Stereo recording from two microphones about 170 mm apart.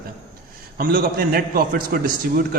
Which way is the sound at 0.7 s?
60° right (ahead or behind).